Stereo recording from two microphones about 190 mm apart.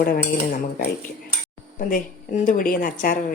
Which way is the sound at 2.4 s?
45° left (ahead or behind).